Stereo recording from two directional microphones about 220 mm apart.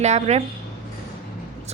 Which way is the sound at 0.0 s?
30° right (ahead or behind).